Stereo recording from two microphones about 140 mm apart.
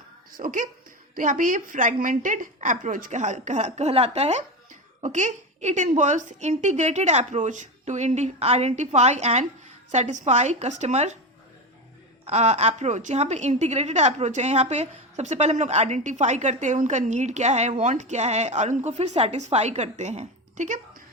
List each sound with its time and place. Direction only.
0.3 s a woman's voice: 85° right; by 11.2 s 50° right (ahead or behind)
12.2 s a woman's voice: 55° right (ahead or behind)